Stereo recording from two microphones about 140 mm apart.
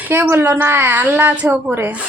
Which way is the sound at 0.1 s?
15° right (ahead or behind).